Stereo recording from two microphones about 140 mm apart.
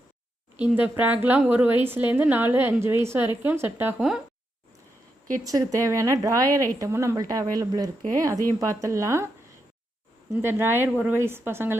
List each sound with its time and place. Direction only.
0.8 s a woman's voice: 10° right (ahead or behind)
5.4 s speech: 25° right (ahead or behind)
10.3 s a woman's voice: 15° right (ahead or behind)